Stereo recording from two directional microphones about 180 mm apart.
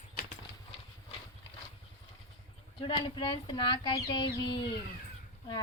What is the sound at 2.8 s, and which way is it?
Speech, 25° left (ahead or behind).